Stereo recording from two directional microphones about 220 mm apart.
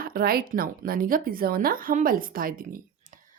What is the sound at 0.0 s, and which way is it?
A woman's voice, 40° right (ahead or behind).